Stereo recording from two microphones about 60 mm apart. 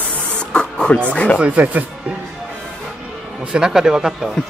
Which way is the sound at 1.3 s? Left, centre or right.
Right.